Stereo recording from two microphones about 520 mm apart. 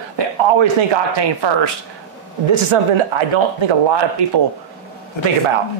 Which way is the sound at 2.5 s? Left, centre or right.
Right.